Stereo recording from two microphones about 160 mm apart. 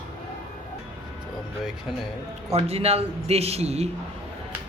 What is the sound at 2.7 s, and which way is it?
A man's voice, 40° right (ahead or behind).